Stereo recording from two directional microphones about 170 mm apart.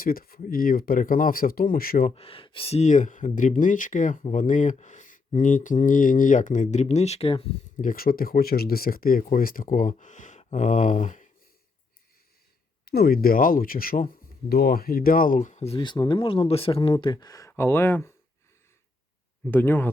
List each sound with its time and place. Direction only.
0.0 s speech: 60° left (ahead or behind)
2.0 s speech: 35° left (ahead or behind)
7.8 s speech: 55° left (ahead or behind)
12.8 s speech: 65° left (ahead or behind); by 18.1 s 15° left (ahead or behind)
19.5 s speech: 10° left (ahead or behind)